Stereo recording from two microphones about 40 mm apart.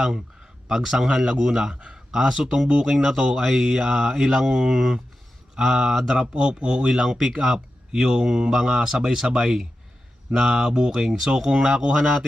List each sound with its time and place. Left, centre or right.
0.7 s speech: centre
1.2 s speech: centre
1.7 s speech: right
2.1 s speech: centre
6.1 s speech: right